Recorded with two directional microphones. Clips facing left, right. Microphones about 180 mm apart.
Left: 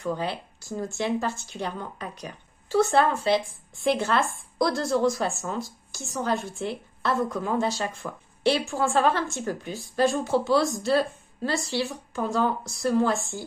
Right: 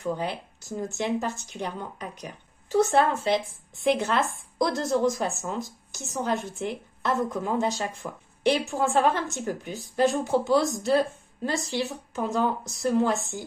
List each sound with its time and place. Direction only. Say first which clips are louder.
0.2 s a woman's voice: left 1 dB; 20° right (ahead or behind)